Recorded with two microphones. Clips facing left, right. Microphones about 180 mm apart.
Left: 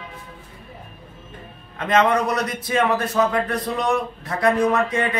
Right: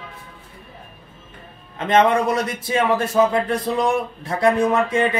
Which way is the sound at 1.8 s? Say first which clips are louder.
Right 2 dB; 25° right (ahead or behind).